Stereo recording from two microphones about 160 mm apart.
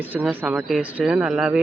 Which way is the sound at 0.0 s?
10° right (ahead or behind).